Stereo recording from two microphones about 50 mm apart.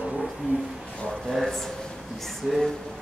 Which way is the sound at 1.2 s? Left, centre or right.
Centre.